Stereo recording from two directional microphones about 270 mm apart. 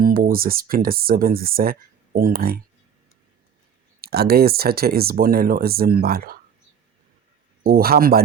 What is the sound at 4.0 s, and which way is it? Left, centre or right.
Speech, right.